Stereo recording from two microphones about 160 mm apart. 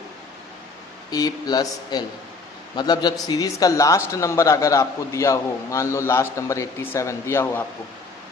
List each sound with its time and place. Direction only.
1.1 s a man's voice: 25° left (ahead or behind)